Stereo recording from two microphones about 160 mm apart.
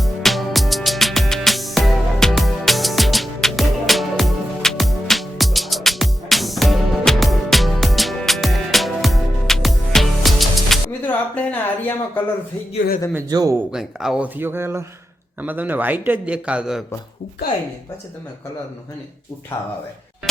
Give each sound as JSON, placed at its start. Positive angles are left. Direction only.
{"t": 0.0, "sound": "music", "side_deg": 0}
{"t": 11.0, "sound": "a sound", "side_deg": 10}
{"t": 13.3, "sound": "speech", "side_deg": -20}
{"t": 13.7, "sound": "a man's voice", "side_deg": -5}
{"t": 19.5, "sound": "speech", "side_deg": 15}